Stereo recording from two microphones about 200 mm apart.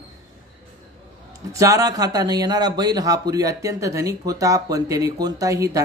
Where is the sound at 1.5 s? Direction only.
15° right (ahead or behind).